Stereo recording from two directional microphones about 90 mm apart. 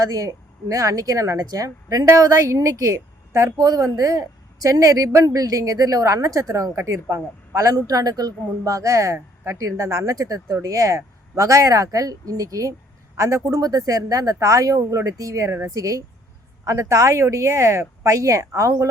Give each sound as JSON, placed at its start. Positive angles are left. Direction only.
{"t": 0.0, "sound": "a woman's voice", "side_deg": -40}